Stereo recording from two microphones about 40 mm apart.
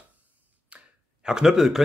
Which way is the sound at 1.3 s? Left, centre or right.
Centre.